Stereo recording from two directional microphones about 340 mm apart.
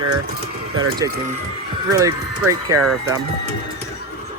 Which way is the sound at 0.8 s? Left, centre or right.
Centre.